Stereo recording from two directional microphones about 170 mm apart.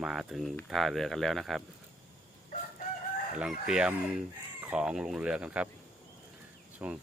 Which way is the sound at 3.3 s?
5° right (ahead or behind).